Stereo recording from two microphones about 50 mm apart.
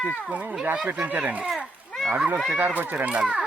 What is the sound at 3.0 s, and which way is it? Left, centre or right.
Speech, right.